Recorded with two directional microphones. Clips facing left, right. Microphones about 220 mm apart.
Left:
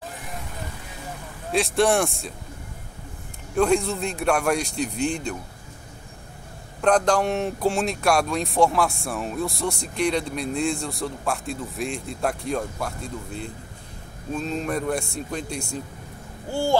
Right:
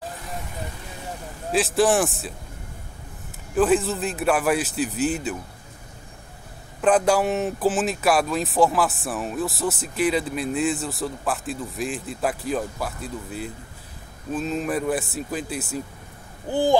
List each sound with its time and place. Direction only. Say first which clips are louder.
1.5 s speech: right 1 dB; centre (ahead or behind)
3.5 s speech: right 1 dB; 5° right (ahead or behind)
6.8 s speech: right 1 dB; 5° right (ahead or behind)
16.4 s speech: right 3 dB; 15° right (ahead or behind)